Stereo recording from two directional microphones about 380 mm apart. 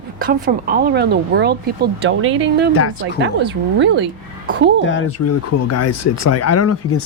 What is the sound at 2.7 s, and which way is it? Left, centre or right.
Speech, left.